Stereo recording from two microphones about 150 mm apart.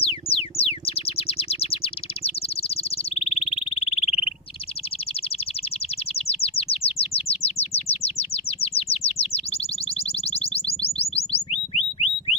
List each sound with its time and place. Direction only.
0.0 s music: 40° left (ahead or behind)
6.1 s chirp: 40° left (ahead or behind)
11.7 s a sound: 45° left (ahead or behind)